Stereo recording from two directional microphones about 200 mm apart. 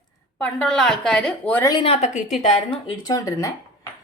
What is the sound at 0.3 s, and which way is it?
A woman's voice, 5° left (ahead or behind).